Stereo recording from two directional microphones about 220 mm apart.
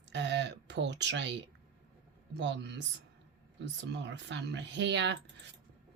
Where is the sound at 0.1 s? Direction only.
55° right (ahead or behind).